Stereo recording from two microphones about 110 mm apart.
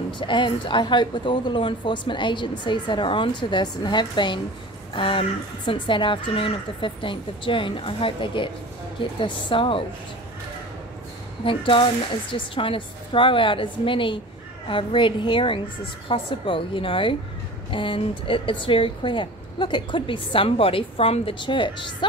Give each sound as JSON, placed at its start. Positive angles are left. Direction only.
{"t": 0.2, "sound": "a woman's voice", "side_deg": 45}
{"t": 11.4, "sound": "a woman's voice", "side_deg": 50}